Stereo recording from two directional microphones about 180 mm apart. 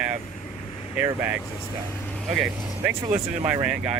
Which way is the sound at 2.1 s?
Centre (ahead or behind).